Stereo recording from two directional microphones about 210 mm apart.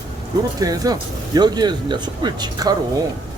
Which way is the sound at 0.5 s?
15° right (ahead or behind).